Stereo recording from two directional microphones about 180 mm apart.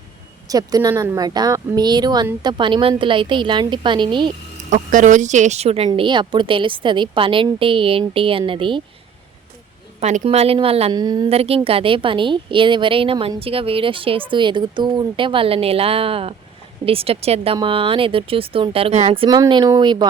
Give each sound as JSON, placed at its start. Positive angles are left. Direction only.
{"t": 0.4, "sound": "a woman's voice", "side_deg": -20}
{"t": 4.7, "sound": "a woman's voice", "side_deg": -45}
{"t": 10.0, "sound": "speech", "side_deg": -40}
{"t": 10.9, "sound": "a woman's voice", "side_deg": -20}
{"t": 11.3, "sound": "a woman's voice", "side_deg": -35}